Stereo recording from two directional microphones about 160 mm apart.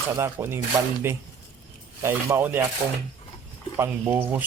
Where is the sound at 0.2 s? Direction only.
15° right (ahead or behind).